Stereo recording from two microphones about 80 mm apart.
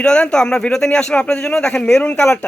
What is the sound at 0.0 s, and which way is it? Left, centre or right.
Speech, centre.